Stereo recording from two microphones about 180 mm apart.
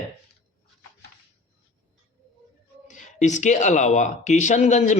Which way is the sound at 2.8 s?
45° left (ahead or behind).